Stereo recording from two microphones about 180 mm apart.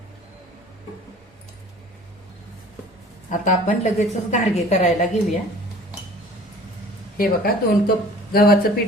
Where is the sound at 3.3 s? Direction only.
40° left (ahead or behind).